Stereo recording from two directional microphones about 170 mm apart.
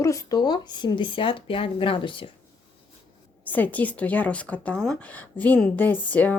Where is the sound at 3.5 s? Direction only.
10° left (ahead or behind).